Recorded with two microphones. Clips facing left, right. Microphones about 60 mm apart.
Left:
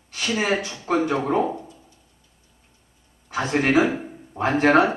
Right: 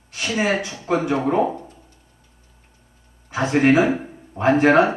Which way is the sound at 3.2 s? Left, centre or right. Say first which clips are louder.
Right 5 dB; right.